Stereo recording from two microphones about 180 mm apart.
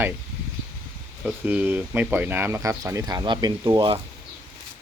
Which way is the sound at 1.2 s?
10° right (ahead or behind).